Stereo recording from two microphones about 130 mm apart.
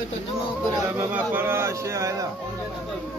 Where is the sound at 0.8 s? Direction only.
15° right (ahead or behind).